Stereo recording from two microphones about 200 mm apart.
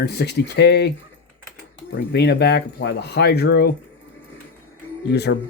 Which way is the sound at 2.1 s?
55° left (ahead or behind).